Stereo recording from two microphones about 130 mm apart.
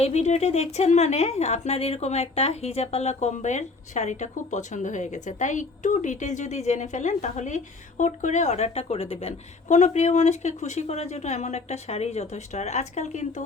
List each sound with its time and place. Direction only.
0.0 s a woman's voice: 60° left (ahead or behind)